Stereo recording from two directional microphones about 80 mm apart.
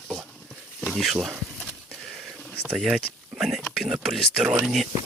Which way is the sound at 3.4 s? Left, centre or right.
Centre.